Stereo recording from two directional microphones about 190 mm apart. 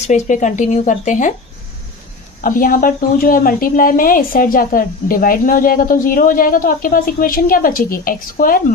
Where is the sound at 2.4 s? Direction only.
45° left (ahead or behind).